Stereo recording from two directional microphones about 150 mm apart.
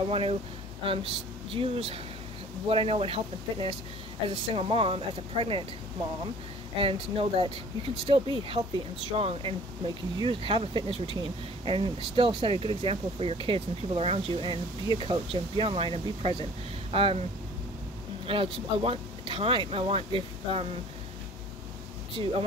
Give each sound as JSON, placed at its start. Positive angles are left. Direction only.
{"t": 0.1, "sound": "speech", "side_deg": -40}
{"t": 6.8, "sound": "speech", "side_deg": -40}
{"t": 18.2, "sound": "speech", "side_deg": -35}
{"t": 22.2, "sound": "speech", "side_deg": -35}